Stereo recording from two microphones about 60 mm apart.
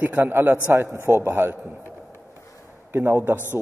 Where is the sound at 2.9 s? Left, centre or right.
Right.